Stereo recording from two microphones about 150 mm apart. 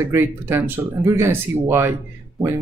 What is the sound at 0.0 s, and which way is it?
Speech, 15° right (ahead or behind).